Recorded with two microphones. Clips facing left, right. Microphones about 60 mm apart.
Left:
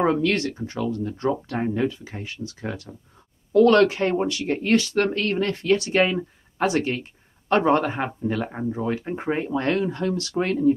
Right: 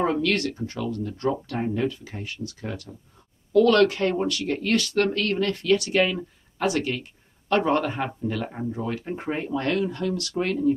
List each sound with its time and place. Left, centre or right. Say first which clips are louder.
0.0 s speech: left 2 dB; left